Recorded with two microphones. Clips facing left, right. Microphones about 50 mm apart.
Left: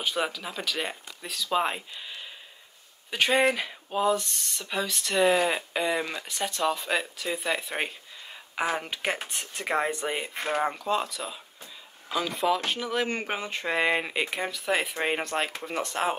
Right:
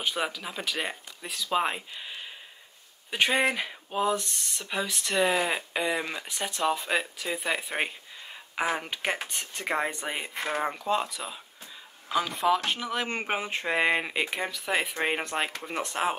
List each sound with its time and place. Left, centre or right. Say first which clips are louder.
0.0 s speech: left 1 dB; centre
10.3 s speech: right 1 dB; left
10.6 s speech: even; centre